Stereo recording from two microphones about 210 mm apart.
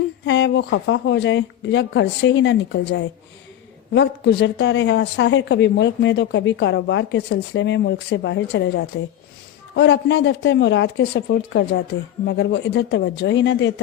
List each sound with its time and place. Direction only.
0.3 s a woman's voice: 60° left (ahead or behind)